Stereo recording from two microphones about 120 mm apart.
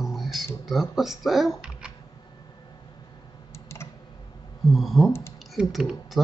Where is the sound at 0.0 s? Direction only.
Centre (ahead or behind).